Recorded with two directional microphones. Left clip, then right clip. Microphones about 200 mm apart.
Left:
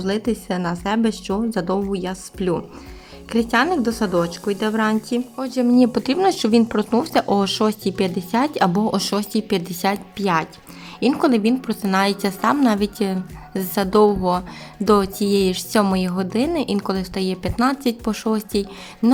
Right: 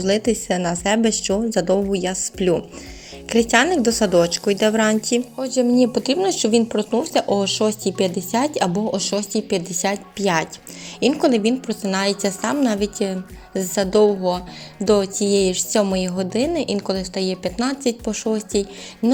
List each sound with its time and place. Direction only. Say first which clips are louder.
0.0 s speech: right 4 dB; centre (ahead or behind)
5.4 s a woman's voice: left 1 dB; 10° left (ahead or behind)